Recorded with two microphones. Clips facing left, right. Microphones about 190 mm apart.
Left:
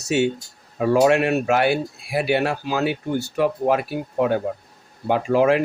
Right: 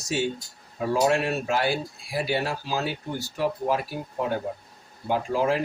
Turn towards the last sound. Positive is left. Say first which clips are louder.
# left 7 dB
turn(degrees=70)  # may be behind; listen again after turning